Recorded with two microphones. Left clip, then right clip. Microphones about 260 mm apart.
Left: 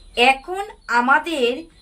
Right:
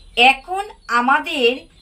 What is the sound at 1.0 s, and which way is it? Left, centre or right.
Speech, centre.